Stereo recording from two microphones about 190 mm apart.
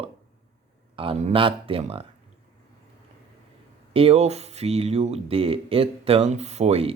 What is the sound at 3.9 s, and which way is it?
Speech, 30° right (ahead or behind).